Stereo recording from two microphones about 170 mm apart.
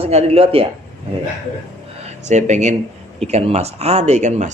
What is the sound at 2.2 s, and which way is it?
A man's voice, 45° right (ahead or behind).